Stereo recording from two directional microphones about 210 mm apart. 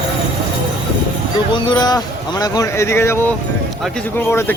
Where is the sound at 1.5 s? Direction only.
20° left (ahead or behind).